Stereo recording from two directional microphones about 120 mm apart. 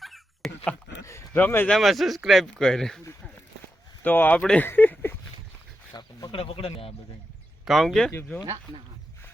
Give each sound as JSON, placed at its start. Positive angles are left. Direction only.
{"t": 0.0, "sound": "dog", "side_deg": 0}
{"t": 1.0, "sound": "a sound", "side_deg": 25}
{"t": 1.4, "sound": "speech", "side_deg": 15}
{"t": 1.7, "sound": "speech", "side_deg": 0}
{"t": 4.0, "sound": "speech", "side_deg": 15}
{"t": 4.4, "sound": "a sound", "side_deg": 15}
{"t": 5.9, "sound": "a sound", "side_deg": 30}
{"t": 6.3, "sound": "speech", "side_deg": 55}
{"t": 7.6, "sound": "speech", "side_deg": 0}